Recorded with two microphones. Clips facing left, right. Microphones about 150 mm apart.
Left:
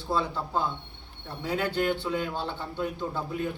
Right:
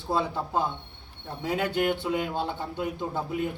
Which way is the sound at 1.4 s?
20° right (ahead or behind).